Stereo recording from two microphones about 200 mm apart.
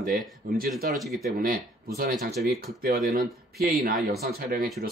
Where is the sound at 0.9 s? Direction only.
Centre (ahead or behind).